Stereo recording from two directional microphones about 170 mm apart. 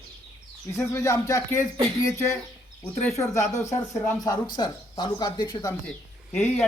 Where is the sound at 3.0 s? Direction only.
20° left (ahead or behind).